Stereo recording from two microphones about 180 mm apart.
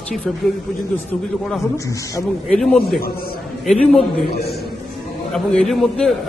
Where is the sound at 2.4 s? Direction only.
Centre (ahead or behind).